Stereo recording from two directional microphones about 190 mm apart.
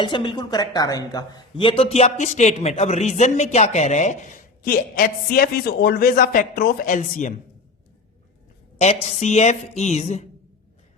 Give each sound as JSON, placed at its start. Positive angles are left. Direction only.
{"t": 0.0, "sound": "a woman's voice", "side_deg": 25}
{"t": 8.8, "sound": "a woman's voice", "side_deg": 35}